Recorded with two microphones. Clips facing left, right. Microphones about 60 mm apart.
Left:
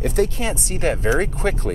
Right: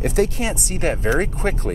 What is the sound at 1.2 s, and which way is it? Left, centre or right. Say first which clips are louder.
Speech: left 1 dB; right.